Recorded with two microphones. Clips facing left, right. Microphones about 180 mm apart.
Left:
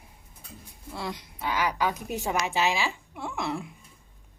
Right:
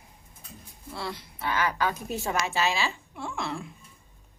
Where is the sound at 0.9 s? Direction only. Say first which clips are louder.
Left 1 dB; 15° left (ahead or behind).